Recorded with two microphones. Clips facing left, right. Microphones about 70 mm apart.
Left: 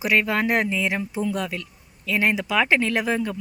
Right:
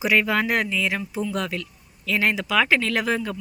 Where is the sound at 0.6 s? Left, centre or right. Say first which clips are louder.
Left 1 dB; left.